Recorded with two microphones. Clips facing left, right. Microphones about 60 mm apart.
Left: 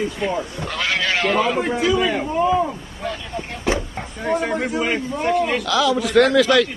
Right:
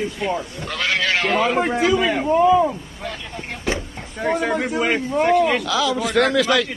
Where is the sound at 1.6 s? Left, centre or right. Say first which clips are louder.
Right 1 dB; right.